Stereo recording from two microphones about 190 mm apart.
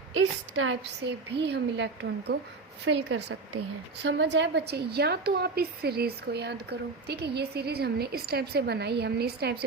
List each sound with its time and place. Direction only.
0.1 s a woman's voice: 90° right
1.4 s a woman's voice: 60° right (ahead or behind)